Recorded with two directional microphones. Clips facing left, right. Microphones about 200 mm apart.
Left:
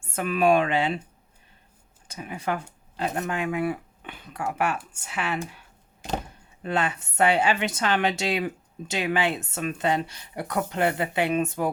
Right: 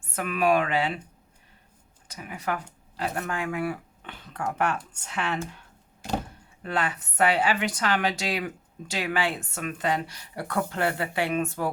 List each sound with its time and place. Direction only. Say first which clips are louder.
0.1 s a woman's voice: left 3 dB; 25° left (ahead or behind)
2.0 s speech: left 2 dB; 25° left (ahead or behind)
6.6 s a woman's voice: left 2 dB; 25° left (ahead or behind)